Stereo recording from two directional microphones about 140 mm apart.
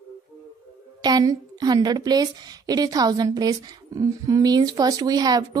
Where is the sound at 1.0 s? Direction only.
30° right (ahead or behind).